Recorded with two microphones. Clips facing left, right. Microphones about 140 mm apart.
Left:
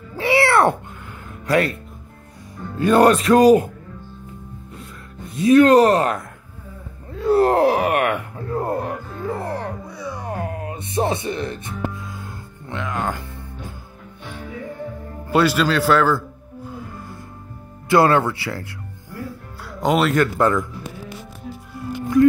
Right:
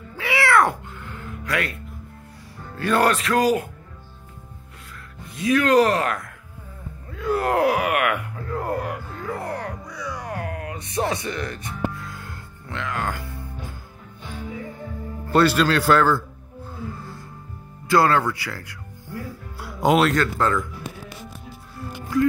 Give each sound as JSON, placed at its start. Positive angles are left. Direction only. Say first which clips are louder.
{"t": 0.2, "sound": "cat", "louder": "left 4 dB", "side_deg": 30}
{"t": 1.4, "sound": "speech", "louder": "left 8 dB", "side_deg": 30}
{"t": 2.8, "sound": "speech", "louder": "left 6 dB", "side_deg": 20}
{"t": 5.3, "sound": "speech", "louder": "left 6 dB", "side_deg": 30}
{"t": 7.1, "sound": "groan", "louder": "left 7 dB", "side_deg": 30}
{"t": 15.2, "sound": "speech", "louder": "even", "side_deg": 10}
{"t": 17.8, "sound": "speech", "louder": "left 3 dB", "side_deg": 20}
{"t": 19.6, "sound": "music", "louder": "right 1 dB", "side_deg": -5}
{"t": 20.1, "sound": "speech", "louder": "left 4 dB", "side_deg": 15}